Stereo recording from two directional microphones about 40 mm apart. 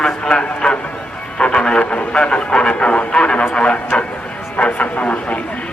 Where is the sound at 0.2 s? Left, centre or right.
Left.